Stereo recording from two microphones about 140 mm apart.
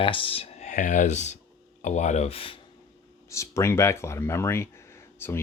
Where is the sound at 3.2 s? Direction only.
20° left (ahead or behind).